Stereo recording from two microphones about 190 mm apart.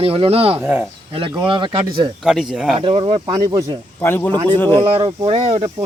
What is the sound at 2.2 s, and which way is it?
Speech, centre (ahead or behind).